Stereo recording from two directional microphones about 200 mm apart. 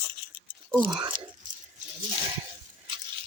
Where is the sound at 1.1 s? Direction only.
40° right (ahead or behind).